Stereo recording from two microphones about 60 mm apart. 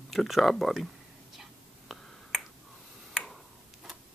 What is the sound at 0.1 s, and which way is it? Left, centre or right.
Speech, centre.